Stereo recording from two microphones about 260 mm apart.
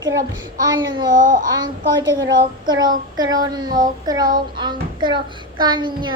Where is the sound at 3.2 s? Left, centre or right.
Centre.